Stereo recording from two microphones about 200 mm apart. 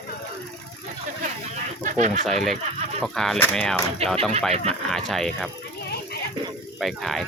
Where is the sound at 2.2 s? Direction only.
Centre (ahead or behind).